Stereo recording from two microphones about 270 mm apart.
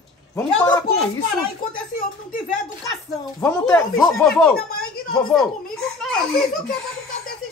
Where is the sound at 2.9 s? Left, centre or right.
Centre.